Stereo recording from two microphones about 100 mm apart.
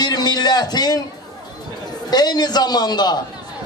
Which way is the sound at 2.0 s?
45° left (ahead or behind).